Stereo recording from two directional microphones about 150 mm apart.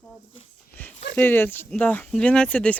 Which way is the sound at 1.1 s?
15° left (ahead or behind).